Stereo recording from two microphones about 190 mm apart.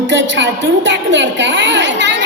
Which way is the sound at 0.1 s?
70° right (ahead or behind).